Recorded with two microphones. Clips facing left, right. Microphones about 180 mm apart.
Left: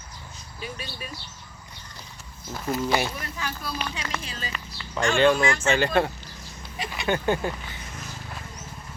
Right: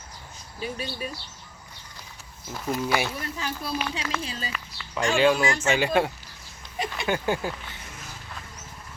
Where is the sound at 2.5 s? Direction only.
Centre (ahead or behind).